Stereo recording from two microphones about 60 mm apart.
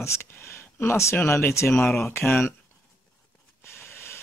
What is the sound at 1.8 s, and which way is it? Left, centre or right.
Speech, left.